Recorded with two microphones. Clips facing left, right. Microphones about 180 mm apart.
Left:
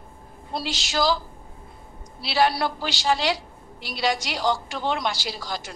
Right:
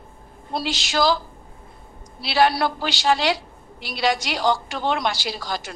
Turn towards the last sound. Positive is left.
turn(degrees=-70)  # may be behind; listen again after turning